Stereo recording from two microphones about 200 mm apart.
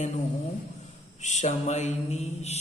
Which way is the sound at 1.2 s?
35° left (ahead or behind).